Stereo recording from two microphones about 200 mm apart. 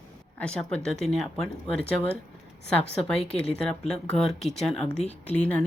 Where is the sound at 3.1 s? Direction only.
30° left (ahead or behind).